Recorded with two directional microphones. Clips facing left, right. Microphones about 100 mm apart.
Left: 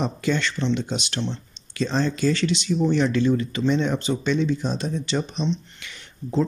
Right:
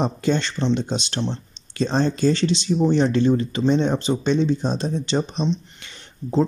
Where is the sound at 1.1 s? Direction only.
15° right (ahead or behind).